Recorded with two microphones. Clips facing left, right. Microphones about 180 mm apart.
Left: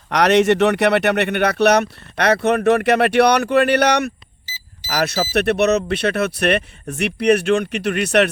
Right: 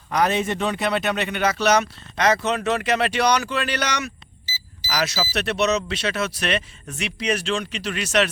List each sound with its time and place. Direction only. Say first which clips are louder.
0.1 s speech: left 7 dB; 80° left; by 8.3 s 60° left (ahead or behind)